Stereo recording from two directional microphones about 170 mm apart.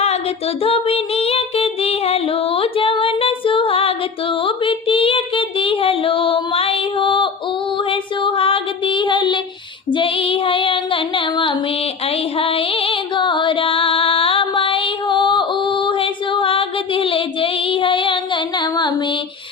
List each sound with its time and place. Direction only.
0.0 s child singing: 35° left (ahead or behind)
7.8 s female singing: 30° left (ahead or behind)